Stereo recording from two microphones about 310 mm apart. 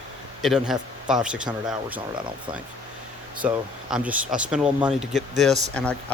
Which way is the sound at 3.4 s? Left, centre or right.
Centre.